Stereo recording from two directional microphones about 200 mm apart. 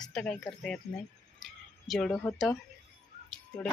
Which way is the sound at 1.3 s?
Centre (ahead or behind).